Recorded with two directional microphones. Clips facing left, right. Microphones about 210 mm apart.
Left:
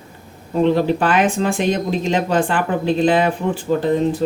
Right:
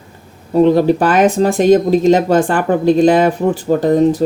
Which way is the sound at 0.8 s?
40° right (ahead or behind).